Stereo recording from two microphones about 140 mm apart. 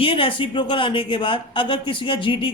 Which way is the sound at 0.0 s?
40° left (ahead or behind).